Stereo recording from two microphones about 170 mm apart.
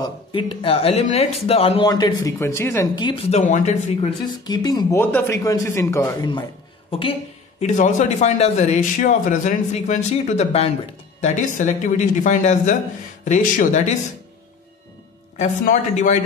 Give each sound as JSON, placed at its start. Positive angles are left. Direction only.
{"t": 0.0, "sound": "speech", "side_deg": 30}
{"t": 1.9, "sound": "speech", "side_deg": 25}
{"t": 4.3, "sound": "speech", "side_deg": 25}
{"t": 4.9, "sound": "a woman's voice", "side_deg": 10}
{"t": 7.6, "sound": "a man's voice", "side_deg": 45}
{"t": 15.3, "sound": "a man's voice", "side_deg": 50}